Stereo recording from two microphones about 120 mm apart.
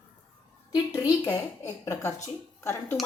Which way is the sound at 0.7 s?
30° left (ahead or behind).